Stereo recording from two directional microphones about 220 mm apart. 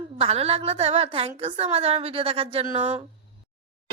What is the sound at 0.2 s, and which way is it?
A woman's voice, 25° right (ahead or behind).